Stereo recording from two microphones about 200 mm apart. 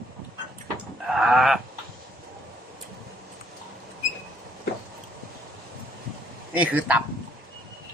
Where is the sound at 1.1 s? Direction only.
Centre (ahead or behind).